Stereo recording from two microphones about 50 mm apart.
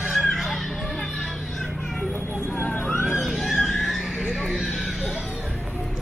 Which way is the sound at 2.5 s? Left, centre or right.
Left.